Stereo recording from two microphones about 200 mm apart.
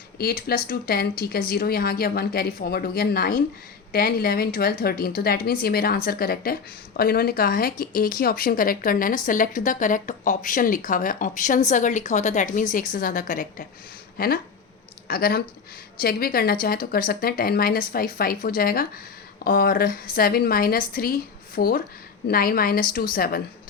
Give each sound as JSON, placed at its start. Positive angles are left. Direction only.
{"t": 0.2, "sound": "a woman's voice", "side_deg": 50}